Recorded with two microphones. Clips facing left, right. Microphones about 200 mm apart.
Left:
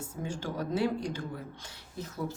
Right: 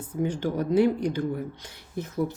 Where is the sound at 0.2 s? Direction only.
20° right (ahead or behind).